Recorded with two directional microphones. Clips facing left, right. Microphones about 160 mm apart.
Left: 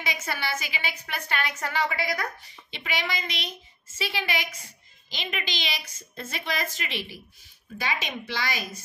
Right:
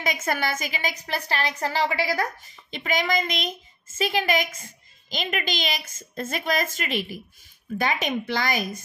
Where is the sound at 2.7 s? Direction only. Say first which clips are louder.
Right 7 dB; 45° right (ahead or behind).